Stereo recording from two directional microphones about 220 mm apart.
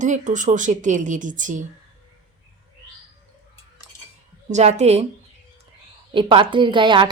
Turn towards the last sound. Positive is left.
turn(degrees=-20)  # may be behind; listen again after turning